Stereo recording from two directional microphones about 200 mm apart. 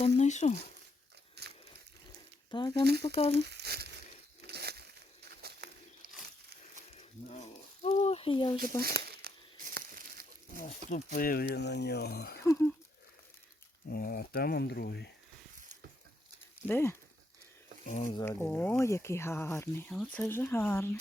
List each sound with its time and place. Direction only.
0.2 s speech: 35° left (ahead or behind)
1.4 s crunch: 55° right (ahead or behind)
2.5 s speech: 20° left (ahead or behind)
3.3 s speech: 55° right (ahead or behind)
4.4 s a sound: 55° right (ahead or behind)
6.9 s a sound: 35° left (ahead or behind)
8.8 s crumpling: 50° right (ahead or behind)
10.8 s speech: 40° left (ahead or behind)
12.4 s speech: 15° left (ahead or behind)
13.9 s speech: 45° left (ahead or behind)
16.6 s speech: 10° left (ahead or behind)
17.8 s speech: 40° left (ahead or behind)
18.1 s speech: 15° left (ahead or behind)